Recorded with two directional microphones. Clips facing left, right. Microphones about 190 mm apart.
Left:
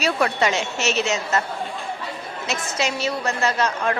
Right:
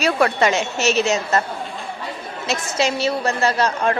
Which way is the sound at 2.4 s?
30° right (ahead or behind).